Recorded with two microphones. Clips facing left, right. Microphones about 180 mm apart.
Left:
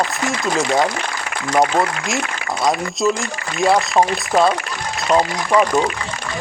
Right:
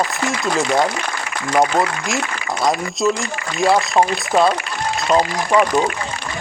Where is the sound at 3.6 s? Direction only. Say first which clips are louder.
Even; centre (ahead or behind).